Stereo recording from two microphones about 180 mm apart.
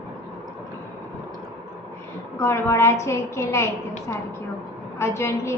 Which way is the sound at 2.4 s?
15° left (ahead or behind).